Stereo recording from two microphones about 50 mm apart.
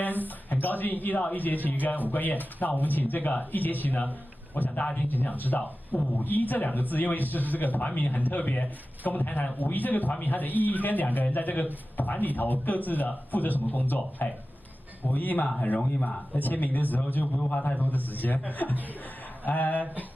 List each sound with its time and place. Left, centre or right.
0.2 s a man's voice: left
4.6 s a man's voice: left
15.8 s speech: left
16.3 s a man's voice: left